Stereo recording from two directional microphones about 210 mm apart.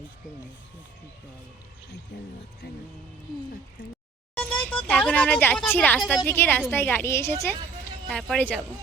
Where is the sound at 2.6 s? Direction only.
50° left (ahead or behind).